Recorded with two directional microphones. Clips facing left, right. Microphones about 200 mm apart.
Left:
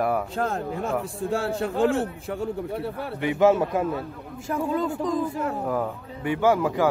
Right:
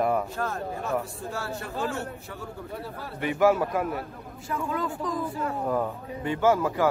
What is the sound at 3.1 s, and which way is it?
Speech, 20° left (ahead or behind).